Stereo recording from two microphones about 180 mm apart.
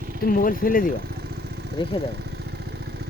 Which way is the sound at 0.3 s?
50° left (ahead or behind).